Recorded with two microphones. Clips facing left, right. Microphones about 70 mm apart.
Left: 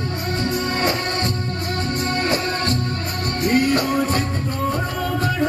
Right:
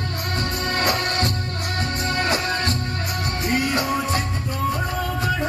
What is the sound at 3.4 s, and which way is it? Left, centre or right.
Music, left.